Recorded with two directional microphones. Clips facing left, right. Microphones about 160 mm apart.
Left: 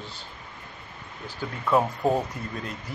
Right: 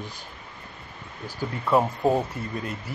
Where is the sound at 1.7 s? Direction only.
Centre (ahead or behind).